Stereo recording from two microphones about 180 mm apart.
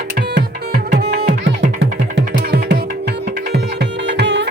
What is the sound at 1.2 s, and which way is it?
Music, 70° right (ahead or behind).